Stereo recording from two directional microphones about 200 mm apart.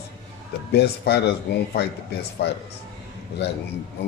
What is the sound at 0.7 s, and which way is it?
Speech, 55° left (ahead or behind).